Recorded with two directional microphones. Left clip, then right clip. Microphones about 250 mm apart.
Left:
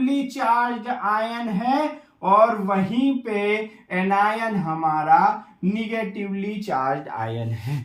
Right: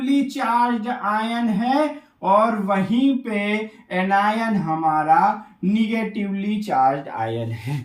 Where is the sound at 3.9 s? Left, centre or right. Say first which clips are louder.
Right 1 dB; centre.